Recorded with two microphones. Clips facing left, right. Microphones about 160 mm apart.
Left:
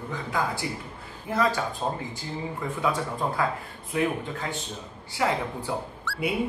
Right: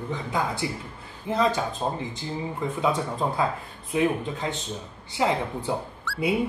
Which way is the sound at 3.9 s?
20° right (ahead or behind).